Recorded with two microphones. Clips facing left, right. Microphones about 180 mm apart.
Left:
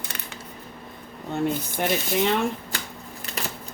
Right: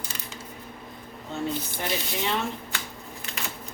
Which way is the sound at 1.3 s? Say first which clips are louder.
Left 5 dB; 55° left (ahead or behind).